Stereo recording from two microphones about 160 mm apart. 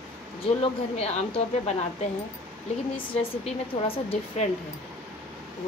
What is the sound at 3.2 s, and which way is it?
Speech, 35° left (ahead or behind).